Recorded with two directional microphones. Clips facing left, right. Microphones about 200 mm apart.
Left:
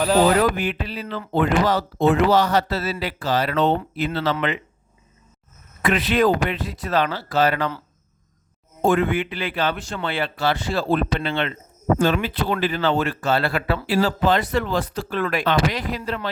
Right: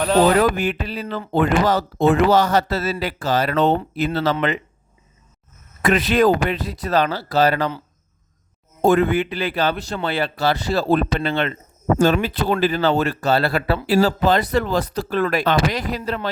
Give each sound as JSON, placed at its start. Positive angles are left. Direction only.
{"t": 0.4, "sound": "speech", "side_deg": -45}
{"t": 5.8, "sound": "speech", "side_deg": -40}
{"t": 8.8, "sound": "speech", "side_deg": -40}